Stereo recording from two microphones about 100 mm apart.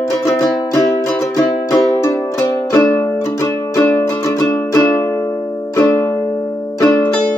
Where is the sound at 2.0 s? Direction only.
30° left (ahead or behind).